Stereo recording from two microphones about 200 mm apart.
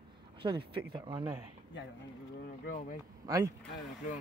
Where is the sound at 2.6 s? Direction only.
45° left (ahead or behind).